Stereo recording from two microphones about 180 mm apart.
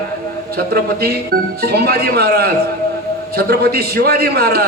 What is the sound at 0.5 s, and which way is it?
A man's voice, 60° right (ahead or behind).